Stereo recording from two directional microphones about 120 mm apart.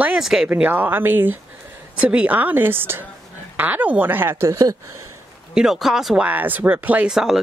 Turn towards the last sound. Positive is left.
turn(degrees=-5)  # may be behind; listen again after turning